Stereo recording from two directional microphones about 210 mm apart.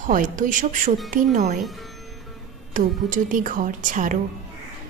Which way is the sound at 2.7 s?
40° right (ahead or behind).